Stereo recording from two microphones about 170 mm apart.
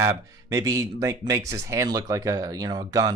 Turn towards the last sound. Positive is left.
turn(degrees=-20)  # may be behind; listen again after turning